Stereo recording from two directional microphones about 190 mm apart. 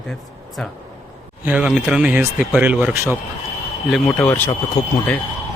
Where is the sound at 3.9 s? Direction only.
5° left (ahead or behind).